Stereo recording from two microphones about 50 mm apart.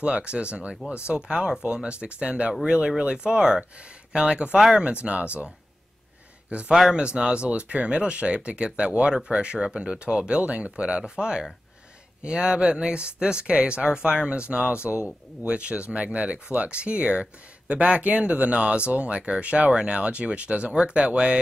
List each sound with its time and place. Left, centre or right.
0.0 s speech: right
6.5 s speech: right